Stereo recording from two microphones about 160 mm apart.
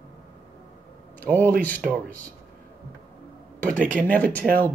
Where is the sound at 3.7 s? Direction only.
55° right (ahead or behind).